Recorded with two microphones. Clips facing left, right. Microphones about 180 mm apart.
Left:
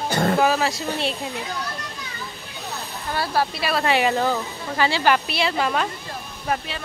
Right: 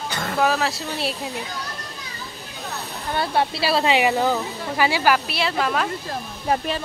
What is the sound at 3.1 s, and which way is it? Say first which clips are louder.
Speech: right 1 dB; 25° right (ahead or behind).